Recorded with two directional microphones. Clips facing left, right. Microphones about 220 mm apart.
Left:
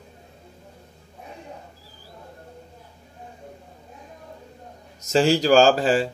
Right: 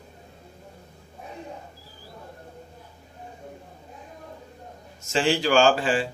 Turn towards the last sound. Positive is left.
turn(degrees=40)  # may be behind; listen again after turning